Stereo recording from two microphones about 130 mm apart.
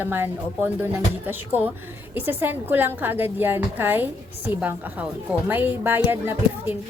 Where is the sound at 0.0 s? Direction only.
15° right (ahead or behind).